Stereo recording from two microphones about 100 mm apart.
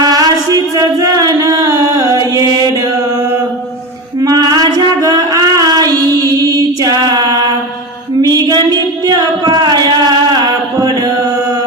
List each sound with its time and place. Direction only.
0.0 s music: 40° right (ahead or behind)
4.2 s female singing: 40° right (ahead or behind)
8.2 s a sound: 40° right (ahead or behind)